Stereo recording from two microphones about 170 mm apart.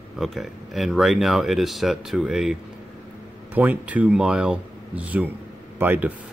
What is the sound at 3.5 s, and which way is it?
Speech, 10° right (ahead or behind).